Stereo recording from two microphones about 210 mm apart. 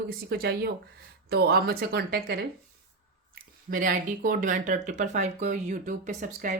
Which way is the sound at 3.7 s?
40° right (ahead or behind).